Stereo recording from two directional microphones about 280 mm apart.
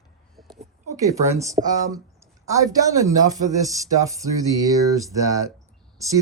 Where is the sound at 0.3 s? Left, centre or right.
Centre.